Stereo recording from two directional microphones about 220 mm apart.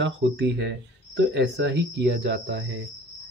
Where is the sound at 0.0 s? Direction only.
55° right (ahead or behind).